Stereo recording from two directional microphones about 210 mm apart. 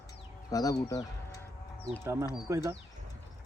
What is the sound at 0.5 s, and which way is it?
Speech, 15° left (ahead or behind).